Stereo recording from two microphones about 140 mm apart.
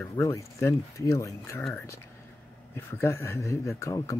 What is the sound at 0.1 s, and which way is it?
Speech, 20° left (ahead or behind).